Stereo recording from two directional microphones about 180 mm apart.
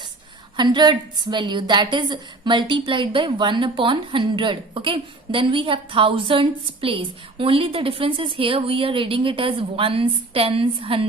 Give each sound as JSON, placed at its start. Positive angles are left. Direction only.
{"t": 0.5, "sound": "a woman's voice", "side_deg": -25}